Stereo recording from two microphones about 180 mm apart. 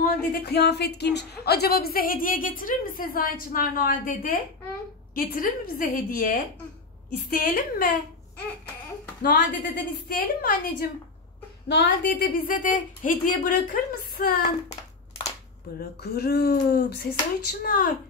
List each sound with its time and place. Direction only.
0.0 s a woman's voice: 60° left (ahead or behind)
9.2 s a woman's voice: 50° left (ahead or behind)
11.6 s a woman's voice: 70° left (ahead or behind)
12.1 s a woman's voice: 50° left (ahead or behind)
14.7 s hands: 35° left (ahead or behind)
16.0 s speech: 60° left (ahead or behind)